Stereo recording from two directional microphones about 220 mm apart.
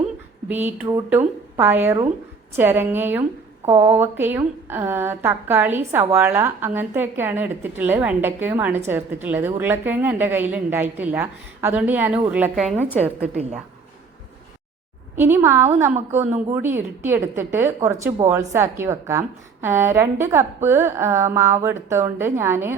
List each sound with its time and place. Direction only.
0.4 s a woman's voice: 10° right (ahead or behind)
13.3 s a woman's voice: 30° right (ahead or behind)
15.1 s a woman's voice: 10° right (ahead or behind)